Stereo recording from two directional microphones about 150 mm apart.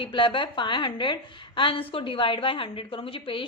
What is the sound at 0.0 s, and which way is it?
A woman's voice, 35° left (ahead or behind).